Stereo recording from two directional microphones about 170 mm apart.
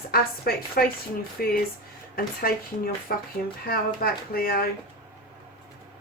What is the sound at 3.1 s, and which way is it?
Speech, 65° left (ahead or behind).